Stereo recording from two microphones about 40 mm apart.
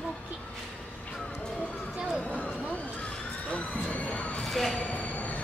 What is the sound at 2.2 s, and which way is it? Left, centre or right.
Vehicle, left.